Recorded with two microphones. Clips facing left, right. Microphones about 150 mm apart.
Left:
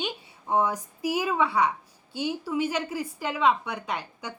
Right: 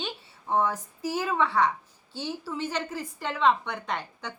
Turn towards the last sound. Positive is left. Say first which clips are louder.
# even
turn(degrees=10)  # may be behind; listen again after turning